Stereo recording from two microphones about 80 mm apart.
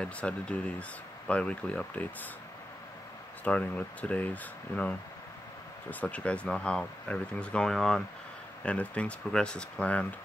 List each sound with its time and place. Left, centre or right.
0.0 s speech: centre
3.4 s speech: centre
8.6 s speech: centre